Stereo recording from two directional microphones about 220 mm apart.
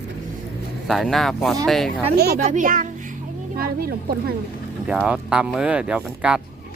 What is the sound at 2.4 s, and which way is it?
A child's voice, 35° right (ahead or behind).